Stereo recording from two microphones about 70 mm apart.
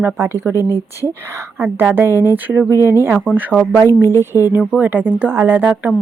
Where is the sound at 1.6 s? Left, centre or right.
Right.